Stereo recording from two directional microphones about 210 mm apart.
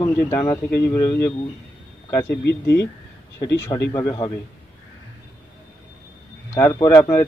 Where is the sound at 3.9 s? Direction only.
20° left (ahead or behind).